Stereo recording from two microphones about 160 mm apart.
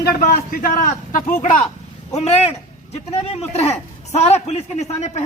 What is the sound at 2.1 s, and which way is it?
A man's voice, 40° left (ahead or behind).